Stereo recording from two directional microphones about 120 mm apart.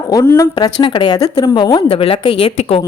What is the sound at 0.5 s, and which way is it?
A woman's voice, 40° left (ahead or behind).